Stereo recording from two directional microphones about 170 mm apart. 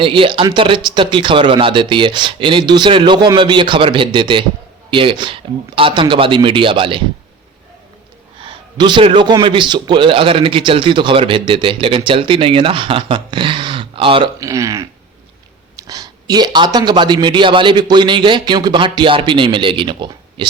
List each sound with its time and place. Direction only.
0.0 s a man's voice: 30° right (ahead or behind)
8.4 s a man's voice: 30° right (ahead or behind)
14.3 s a man's voice: 20° right (ahead or behind)